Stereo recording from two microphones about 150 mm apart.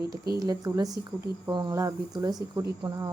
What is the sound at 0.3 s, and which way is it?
Speech, 25° right (ahead or behind).